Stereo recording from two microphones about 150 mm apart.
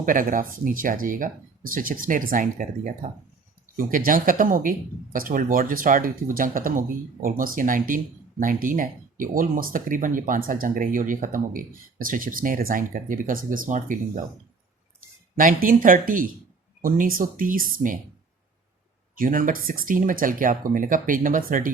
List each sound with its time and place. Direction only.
0.0 s speech: 60° right (ahead or behind)
15.4 s speech: 65° right (ahead or behind)
19.1 s speech: 65° right (ahead or behind)